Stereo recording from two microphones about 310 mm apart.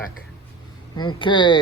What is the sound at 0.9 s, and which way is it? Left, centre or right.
Speech, centre.